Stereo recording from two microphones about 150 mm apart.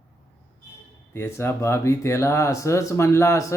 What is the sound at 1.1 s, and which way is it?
Speech, 15° left (ahead or behind).